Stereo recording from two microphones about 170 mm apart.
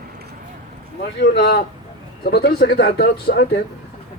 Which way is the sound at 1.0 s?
75° left (ahead or behind).